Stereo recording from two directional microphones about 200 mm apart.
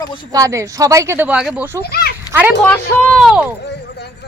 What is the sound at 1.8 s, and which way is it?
Speech, 50° left (ahead or behind).